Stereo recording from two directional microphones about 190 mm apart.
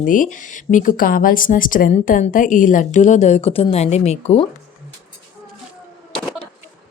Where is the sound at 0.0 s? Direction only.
45° left (ahead or behind).